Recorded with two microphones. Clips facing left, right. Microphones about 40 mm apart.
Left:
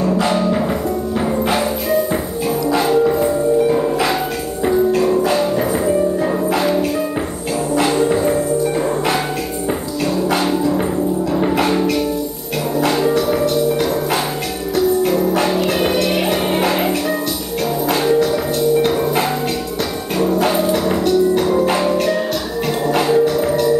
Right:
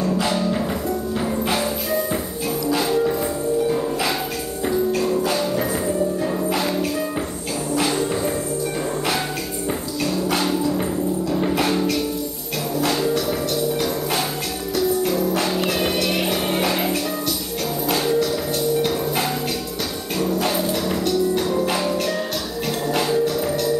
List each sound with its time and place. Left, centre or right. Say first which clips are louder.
0.0 s music: left 5 dB; centre
10.0 s music: left 5 dB; centre